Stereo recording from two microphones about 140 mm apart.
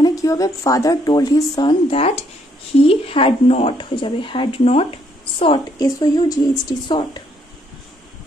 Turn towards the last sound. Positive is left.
turn(degrees=30)  # may be behind; listen again after turning